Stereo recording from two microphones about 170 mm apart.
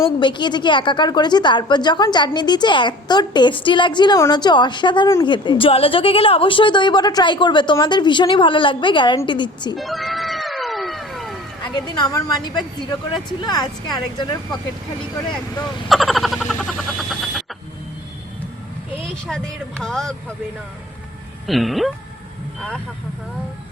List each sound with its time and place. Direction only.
0.2 s a woman's voice: 25° left (ahead or behind)
9.7 s cat: centre (ahead or behind)
11.6 s a woman's voice: 25° left (ahead or behind)
13.4 s a woman's voice: 25° left (ahead or behind)
15.9 s a sound: centre (ahead or behind)
19.3 s speech: 5° left (ahead or behind)
21.4 s speech: centre (ahead or behind)